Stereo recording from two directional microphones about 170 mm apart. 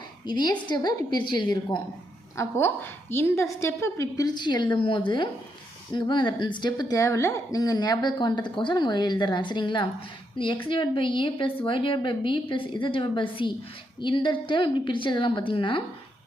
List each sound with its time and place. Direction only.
0.3 s a woman's voice: 25° left (ahead or behind)
2.3 s a woman's voice: 15° left (ahead or behind); by 15.8 s 30° left (ahead or behind)